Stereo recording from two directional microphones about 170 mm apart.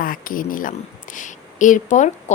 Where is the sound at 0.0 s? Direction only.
55° left (ahead or behind).